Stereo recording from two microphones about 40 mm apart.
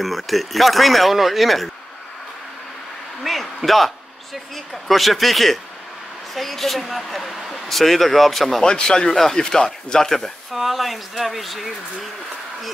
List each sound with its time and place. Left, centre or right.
0.0 s speech: centre
3.3 s a sound: centre
4.8 s speech: centre
8.6 s speech: centre
10.5 s speech: centre